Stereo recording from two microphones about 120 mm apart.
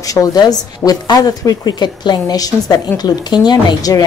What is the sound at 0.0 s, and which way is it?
A woman's voice, 30° left (ahead or behind).